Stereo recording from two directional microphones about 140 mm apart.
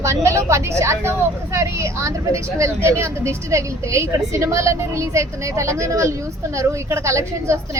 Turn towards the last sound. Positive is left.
turn(degrees=-20)  # may be behind; listen again after turning